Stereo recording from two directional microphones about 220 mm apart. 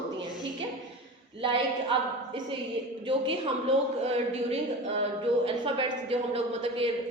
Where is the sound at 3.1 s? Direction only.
25° right (ahead or behind).